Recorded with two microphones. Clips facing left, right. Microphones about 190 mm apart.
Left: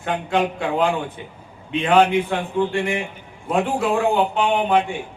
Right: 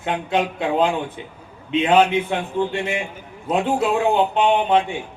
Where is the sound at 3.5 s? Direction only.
20° right (ahead or behind).